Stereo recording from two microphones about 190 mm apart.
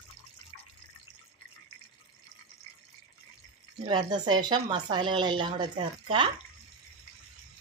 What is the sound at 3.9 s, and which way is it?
Speech, 25° right (ahead or behind).